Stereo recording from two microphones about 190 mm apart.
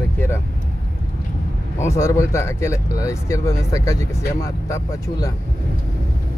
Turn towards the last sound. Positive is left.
turn(degrees=15)  # may be behind; listen again after turning